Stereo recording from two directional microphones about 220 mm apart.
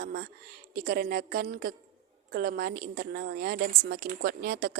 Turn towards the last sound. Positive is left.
turn(degrees=-45)  # may be behind; listen again after turning